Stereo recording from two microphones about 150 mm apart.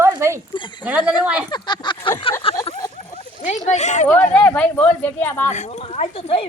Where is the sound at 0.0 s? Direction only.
20° right (ahead or behind).